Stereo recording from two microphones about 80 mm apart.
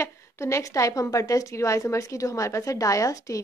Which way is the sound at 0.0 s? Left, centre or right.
Left.